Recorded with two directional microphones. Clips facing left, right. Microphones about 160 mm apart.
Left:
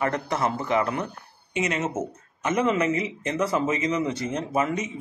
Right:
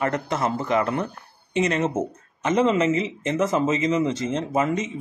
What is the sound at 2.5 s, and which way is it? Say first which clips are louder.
Speech: right 3 dB; 25° right (ahead or behind).